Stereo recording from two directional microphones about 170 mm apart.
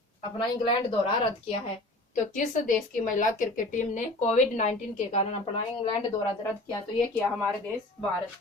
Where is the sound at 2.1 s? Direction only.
50° left (ahead or behind).